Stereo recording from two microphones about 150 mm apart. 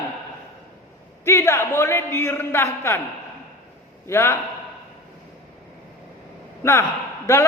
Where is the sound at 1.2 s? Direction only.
15° left (ahead or behind).